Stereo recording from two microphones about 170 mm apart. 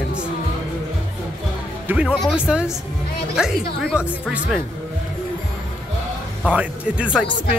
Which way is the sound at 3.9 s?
5° right (ahead or behind).